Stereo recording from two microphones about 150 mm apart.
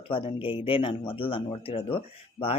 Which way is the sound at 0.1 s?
35° left (ahead or behind).